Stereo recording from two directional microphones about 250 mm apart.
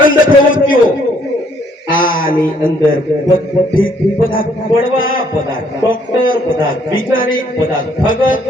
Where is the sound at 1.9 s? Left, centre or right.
Left.